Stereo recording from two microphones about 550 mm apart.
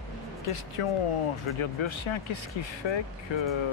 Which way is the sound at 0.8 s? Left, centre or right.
Left.